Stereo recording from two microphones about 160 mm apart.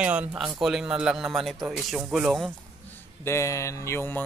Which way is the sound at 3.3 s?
15° left (ahead or behind).